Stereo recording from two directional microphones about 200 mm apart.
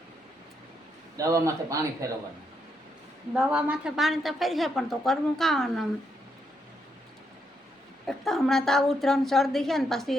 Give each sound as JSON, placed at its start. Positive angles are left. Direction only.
{"t": 1.1, "sound": "speech", "side_deg": -15}
{"t": 3.3, "sound": "a woman's voice", "side_deg": -5}
{"t": 8.0, "sound": "a woman's voice", "side_deg": 0}